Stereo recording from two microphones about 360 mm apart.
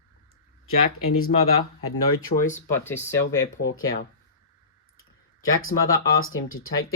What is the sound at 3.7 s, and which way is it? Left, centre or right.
Speech, left.